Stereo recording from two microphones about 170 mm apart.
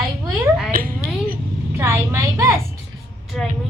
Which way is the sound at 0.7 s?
55° right (ahead or behind).